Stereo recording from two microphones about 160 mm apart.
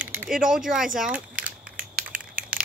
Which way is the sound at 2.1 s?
60° right (ahead or behind).